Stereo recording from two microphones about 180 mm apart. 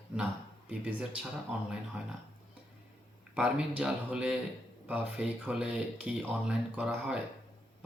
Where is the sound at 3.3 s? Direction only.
5° right (ahead or behind).